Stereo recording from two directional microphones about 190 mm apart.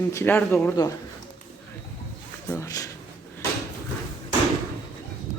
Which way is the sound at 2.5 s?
15° left (ahead or behind).